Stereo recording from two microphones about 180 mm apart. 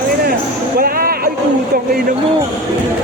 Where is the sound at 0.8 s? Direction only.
55° right (ahead or behind).